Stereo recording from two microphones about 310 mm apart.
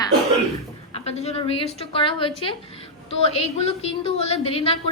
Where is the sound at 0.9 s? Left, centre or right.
Centre.